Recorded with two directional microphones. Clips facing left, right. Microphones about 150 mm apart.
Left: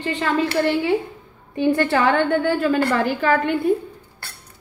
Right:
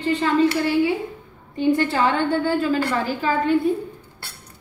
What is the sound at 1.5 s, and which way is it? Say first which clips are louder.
A woman's voice: left 1 dB; 65° left (ahead or behind).